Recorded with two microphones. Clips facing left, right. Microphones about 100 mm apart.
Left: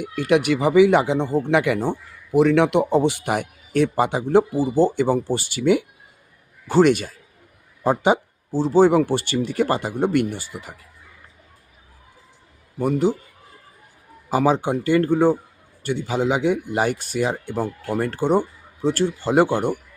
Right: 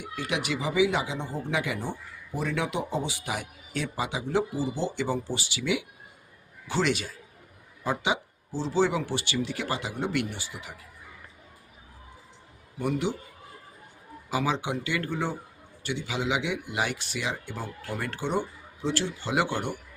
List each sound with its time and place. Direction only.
0.0 s speech: 55° left (ahead or behind)
12.8 s a man's voice: 40° left (ahead or behind)
14.3 s speech: 45° left (ahead or behind)